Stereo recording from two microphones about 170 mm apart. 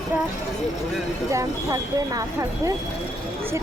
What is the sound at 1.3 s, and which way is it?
A woman's voice, 20° right (ahead or behind).